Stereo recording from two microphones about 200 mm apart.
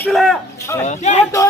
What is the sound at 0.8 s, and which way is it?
Speech, 35° left (ahead or behind).